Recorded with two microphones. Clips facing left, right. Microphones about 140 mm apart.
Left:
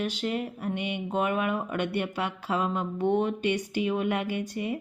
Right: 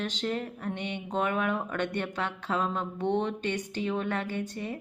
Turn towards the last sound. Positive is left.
turn(degrees=10)  # may be behind; listen again after turning